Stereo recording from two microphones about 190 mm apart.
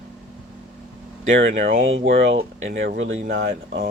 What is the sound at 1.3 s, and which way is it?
Speech, 80° right.